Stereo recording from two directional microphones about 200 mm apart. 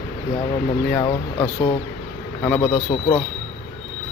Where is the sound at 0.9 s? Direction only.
15° left (ahead or behind).